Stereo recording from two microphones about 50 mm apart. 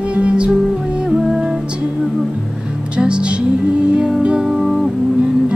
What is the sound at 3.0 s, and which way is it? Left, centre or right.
Music, centre.